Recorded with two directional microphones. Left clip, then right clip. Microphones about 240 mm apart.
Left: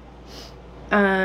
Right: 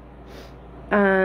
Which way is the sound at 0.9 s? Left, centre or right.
Right.